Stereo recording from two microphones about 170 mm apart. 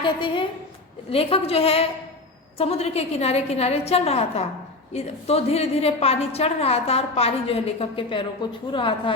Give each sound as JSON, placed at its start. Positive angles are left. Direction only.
{"t": 0.0, "sound": "a woman's voice", "side_deg": 30}